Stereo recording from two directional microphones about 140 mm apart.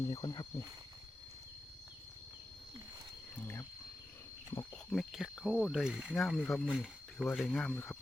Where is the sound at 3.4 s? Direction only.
15° left (ahead or behind).